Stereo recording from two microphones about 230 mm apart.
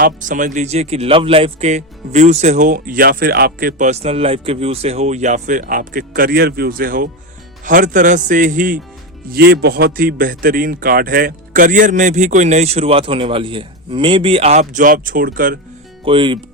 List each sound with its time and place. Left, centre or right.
0.0 s speech: right
16.0 s speech: right